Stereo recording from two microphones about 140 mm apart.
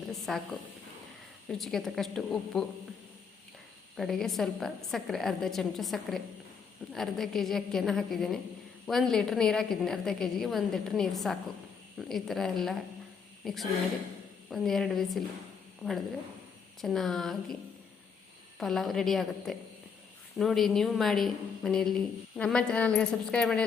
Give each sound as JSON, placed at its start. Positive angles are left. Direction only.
{"t": 0.1, "sound": "a woman's voice", "side_deg": 0}
{"t": 1.5, "sound": "a woman's voice", "side_deg": 0}
{"t": 3.9, "sound": "a woman's voice", "side_deg": 0}
{"t": 18.6, "sound": "a woman's voice", "side_deg": 0}